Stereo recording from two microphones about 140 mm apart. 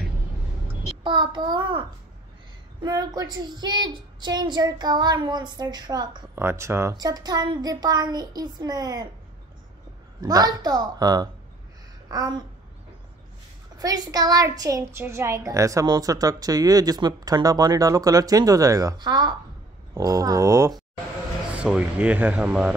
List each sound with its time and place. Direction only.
1.0 s a woman's voice: 35° right (ahead or behind)
2.8 s a woman's voice: 25° right (ahead or behind)
6.3 s a woman's voice: 20° right (ahead or behind)
10.2 s a woman's voice: 25° right (ahead or behind)
13.7 s a woman's voice: 25° right (ahead or behind)
21.5 s speech: 10° right (ahead or behind)